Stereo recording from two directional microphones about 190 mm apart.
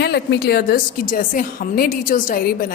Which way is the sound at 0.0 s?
60° left (ahead or behind).